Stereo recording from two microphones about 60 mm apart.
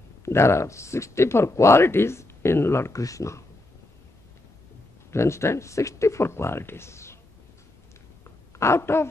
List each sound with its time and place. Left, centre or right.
0.2 s speech: left
2.9 s speech: left
5.1 s speech: left
8.2 s a sound: left